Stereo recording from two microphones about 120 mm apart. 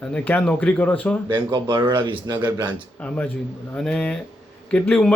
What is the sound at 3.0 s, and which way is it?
Speech, 10° left (ahead or behind).